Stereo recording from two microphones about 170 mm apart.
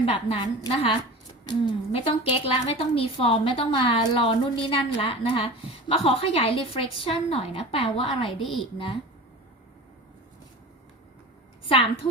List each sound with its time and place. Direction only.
0.0 s a woman's voice: 30° left (ahead or behind)